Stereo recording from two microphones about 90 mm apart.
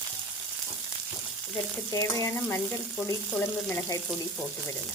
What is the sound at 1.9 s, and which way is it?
Stir, 40° left (ahead or behind).